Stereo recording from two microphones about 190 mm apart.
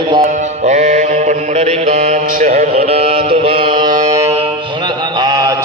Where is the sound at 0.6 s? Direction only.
40° right (ahead or behind); by 4.1 s 20° right (ahead or behind).